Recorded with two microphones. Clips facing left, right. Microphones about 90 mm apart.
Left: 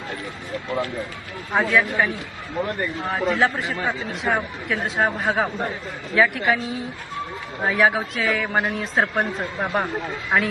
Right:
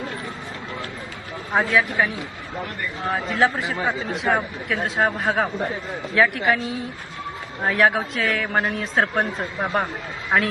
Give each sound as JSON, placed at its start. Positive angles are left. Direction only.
{"t": 1.5, "sound": "a man's voice", "side_deg": 0}
{"t": 3.1, "sound": "a man's voice", "side_deg": 0}